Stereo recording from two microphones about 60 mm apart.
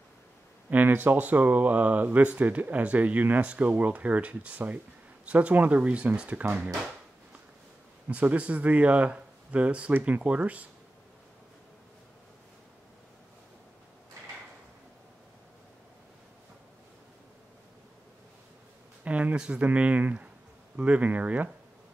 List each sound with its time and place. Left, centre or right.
0.7 s speech: right
8.1 s speech: right
19.0 s speech: right